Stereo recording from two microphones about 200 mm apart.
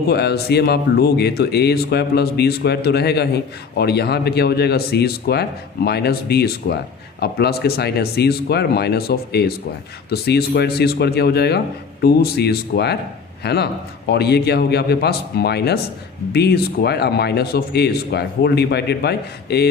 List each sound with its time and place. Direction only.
0.1 s a man's voice: 55° left (ahead or behind)